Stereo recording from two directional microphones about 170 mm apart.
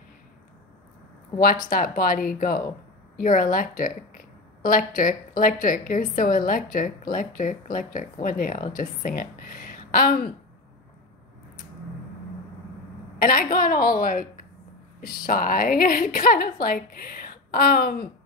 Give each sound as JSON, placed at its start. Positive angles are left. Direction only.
{"t": 1.7, "sound": "a woman's voice", "side_deg": 55}
{"t": 13.2, "sound": "a woman's voice", "side_deg": 55}